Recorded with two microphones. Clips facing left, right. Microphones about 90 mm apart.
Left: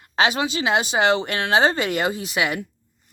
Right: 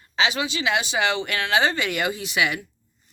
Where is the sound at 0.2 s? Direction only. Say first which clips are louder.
Left 3 dB; 45° left (ahead or behind).